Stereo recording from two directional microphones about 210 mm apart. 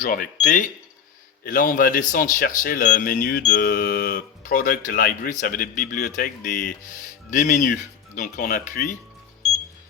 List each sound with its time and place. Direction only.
0.0 s speech: 40° left (ahead or behind)